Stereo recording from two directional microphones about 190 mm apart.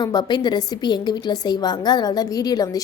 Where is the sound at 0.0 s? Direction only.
20° left (ahead or behind).